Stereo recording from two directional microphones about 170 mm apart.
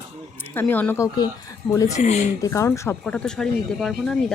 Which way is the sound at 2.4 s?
15° left (ahead or behind).